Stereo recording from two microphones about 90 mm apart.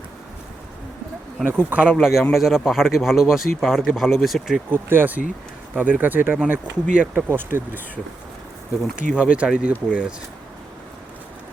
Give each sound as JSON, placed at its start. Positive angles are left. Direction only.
{"t": 1.5, "sound": "speech", "side_deg": -20}
{"t": 2.0, "sound": "speech", "side_deg": -5}
{"t": 4.7, "sound": "speech", "side_deg": -20}
{"t": 9.0, "sound": "speech", "side_deg": -15}